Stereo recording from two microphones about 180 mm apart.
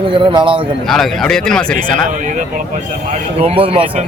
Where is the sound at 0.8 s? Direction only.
Centre (ahead or behind).